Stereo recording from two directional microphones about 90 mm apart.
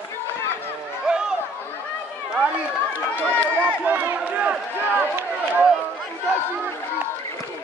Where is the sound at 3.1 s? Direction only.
20° left (ahead or behind).